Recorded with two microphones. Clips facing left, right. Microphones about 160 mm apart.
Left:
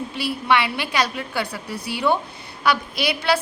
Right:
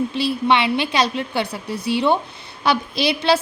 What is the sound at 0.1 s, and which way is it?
A woman's voice, 25° right (ahead or behind).